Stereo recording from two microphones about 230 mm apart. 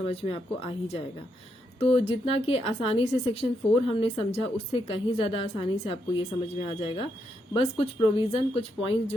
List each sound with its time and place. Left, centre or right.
0.0 s a woman's voice: left